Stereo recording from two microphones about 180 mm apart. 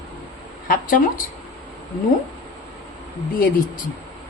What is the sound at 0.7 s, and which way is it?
Speech, 50° left (ahead or behind).